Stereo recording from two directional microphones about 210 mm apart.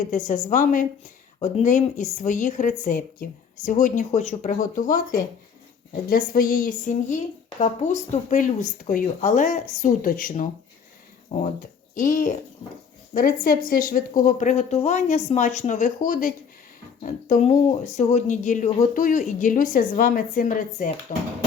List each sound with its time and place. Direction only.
0.3 s a woman's voice: 35° left (ahead or behind)